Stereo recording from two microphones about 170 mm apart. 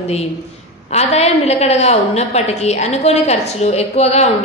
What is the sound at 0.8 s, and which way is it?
A woman's voice, 40° left (ahead or behind).